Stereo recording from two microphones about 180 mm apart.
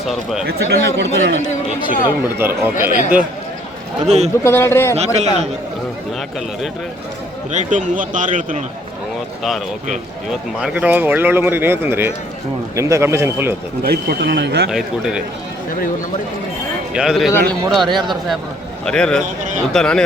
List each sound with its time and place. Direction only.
0.1 s speech: centre (ahead or behind)
0.4 s speech: 65° right (ahead or behind)
2.4 s speech: 10° right (ahead or behind)
4.0 s a man's voice: 40° right (ahead or behind)
4.4 s speech: 15° left (ahead or behind)
4.9 s a man's voice: 35° right (ahead or behind)
7.5 s a man's voice: 45° right (ahead or behind)
10.6 s speech: 10° right (ahead or behind)
13.8 s speech: 60° right (ahead or behind)
14.7 s speech: centre (ahead or behind)
16.9 s speech: 5° right (ahead or behind)